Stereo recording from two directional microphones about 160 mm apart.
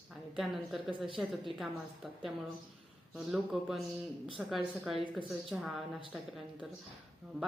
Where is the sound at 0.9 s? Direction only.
30° right (ahead or behind).